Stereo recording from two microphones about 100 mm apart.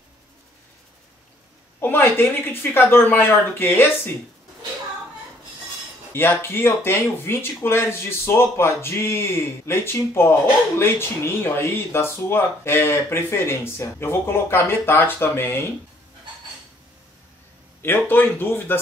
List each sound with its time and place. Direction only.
1.8 s a woman's voice: 20° left (ahead or behind)
6.1 s speech: 20° left (ahead or behind)
17.8 s speech: 20° left (ahead or behind)